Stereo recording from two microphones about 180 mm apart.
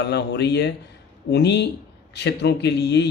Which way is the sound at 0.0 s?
70° left (ahead or behind).